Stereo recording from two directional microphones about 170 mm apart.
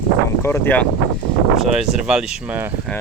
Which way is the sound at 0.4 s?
15° left (ahead or behind).